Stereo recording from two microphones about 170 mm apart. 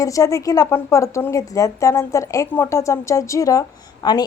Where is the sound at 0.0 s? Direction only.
20° left (ahead or behind).